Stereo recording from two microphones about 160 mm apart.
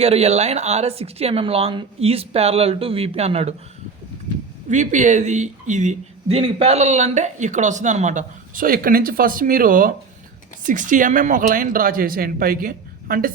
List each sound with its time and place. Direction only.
0.0 s speech: 40° right (ahead or behind)
4.7 s speech: 50° right (ahead or behind)